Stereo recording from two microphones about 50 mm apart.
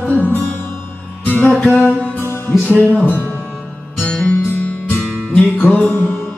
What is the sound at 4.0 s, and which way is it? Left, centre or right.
Music, left.